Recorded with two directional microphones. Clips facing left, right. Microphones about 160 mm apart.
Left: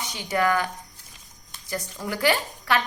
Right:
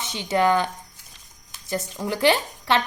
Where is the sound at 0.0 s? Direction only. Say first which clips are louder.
Right 3 dB; 25° right (ahead or behind).